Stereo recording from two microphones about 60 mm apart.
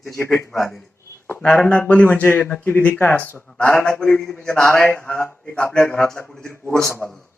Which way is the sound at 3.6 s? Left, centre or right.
Left.